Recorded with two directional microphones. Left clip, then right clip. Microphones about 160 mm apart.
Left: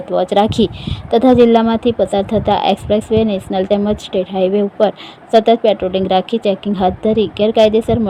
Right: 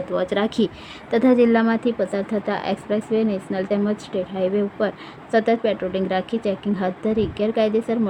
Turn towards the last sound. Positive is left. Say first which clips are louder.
# left 9 dB
turn(degrees=25)  # may be behind; listen again after turning